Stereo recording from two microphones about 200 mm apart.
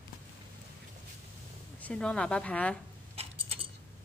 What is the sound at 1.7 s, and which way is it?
Speech, 5° left (ahead or behind).